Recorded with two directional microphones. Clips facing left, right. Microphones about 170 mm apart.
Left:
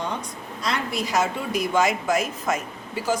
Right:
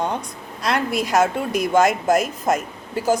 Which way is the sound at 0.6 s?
55° right (ahead or behind).